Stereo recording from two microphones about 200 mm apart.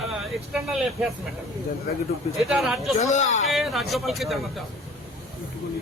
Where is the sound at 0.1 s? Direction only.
5° right (ahead or behind).